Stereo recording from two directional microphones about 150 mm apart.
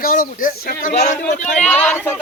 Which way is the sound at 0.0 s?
65° left (ahead or behind).